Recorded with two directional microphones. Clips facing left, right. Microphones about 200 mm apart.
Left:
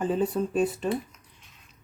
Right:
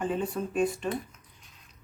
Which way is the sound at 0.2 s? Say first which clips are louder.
Left 3 dB; 35° left (ahead or behind).